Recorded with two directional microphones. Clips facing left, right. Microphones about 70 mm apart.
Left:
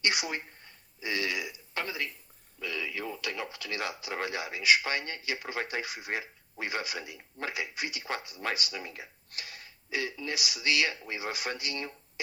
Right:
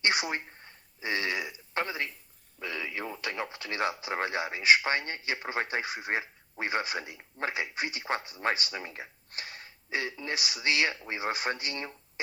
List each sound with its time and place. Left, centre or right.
0.0 s speech: right